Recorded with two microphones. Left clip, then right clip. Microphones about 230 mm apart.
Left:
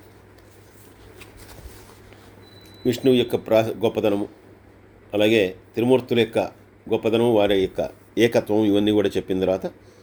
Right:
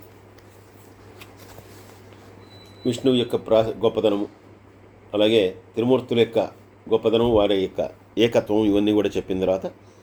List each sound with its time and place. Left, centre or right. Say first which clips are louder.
2.8 s a man's voice: left 2 dB; left